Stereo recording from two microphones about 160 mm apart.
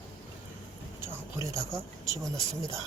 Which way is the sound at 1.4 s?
20° right (ahead or behind).